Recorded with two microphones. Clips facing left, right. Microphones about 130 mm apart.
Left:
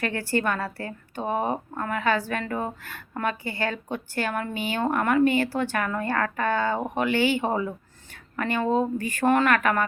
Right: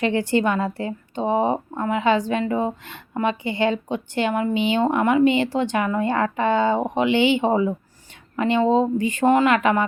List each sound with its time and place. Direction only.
0.0 s a woman's voice: 20° right (ahead or behind)